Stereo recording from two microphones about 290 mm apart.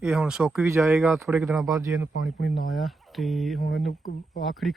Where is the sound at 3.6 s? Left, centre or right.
Left.